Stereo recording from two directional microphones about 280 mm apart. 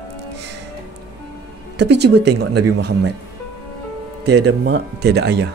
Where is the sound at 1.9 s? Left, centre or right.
Right.